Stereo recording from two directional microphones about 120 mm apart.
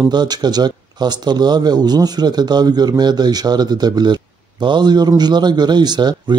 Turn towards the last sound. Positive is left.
turn(degrees=-35)  # may be behind; listen again after turning